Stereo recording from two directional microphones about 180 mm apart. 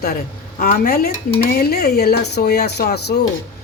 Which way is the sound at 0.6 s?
55° left (ahead or behind).